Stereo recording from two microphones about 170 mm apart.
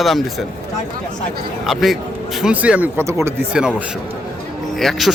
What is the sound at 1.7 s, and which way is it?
Speech, centre (ahead or behind).